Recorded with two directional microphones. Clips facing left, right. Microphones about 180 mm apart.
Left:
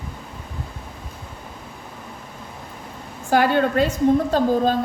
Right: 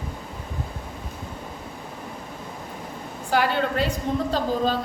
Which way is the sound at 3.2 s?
50° left (ahead or behind).